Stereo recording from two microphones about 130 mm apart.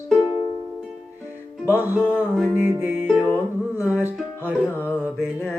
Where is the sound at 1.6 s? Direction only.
15° right (ahead or behind).